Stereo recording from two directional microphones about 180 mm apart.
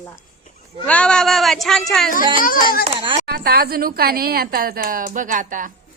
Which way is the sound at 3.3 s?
60° right (ahead or behind).